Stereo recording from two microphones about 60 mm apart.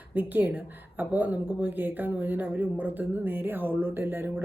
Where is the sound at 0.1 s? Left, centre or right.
Right.